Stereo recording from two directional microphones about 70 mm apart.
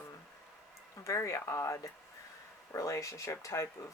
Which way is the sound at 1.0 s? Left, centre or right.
Left.